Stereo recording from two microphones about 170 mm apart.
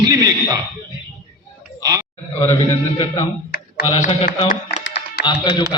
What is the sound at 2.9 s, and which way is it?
Speech, 30° left (ahead or behind).